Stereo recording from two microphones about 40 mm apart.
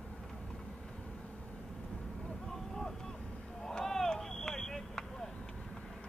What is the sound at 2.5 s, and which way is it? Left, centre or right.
Boat, centre.